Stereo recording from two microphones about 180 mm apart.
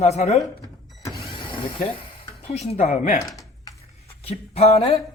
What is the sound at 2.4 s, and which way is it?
Speech, 35° left (ahead or behind).